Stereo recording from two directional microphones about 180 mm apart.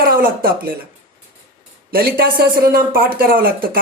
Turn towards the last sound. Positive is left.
turn(degrees=-55)  # may be behind; listen again after turning